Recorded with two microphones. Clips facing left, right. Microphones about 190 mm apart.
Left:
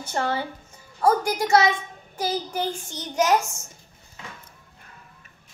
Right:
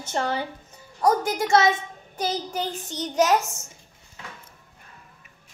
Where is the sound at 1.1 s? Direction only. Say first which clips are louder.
Left 1 dB; 25° right (ahead or behind).